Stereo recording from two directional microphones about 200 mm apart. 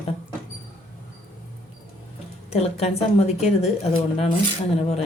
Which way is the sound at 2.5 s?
30° left (ahead or behind).